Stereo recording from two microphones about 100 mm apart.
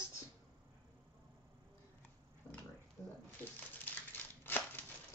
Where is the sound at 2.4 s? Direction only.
15° left (ahead or behind).